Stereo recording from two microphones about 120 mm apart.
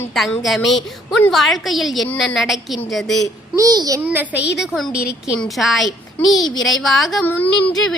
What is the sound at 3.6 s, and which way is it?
Speech, 30° right (ahead or behind).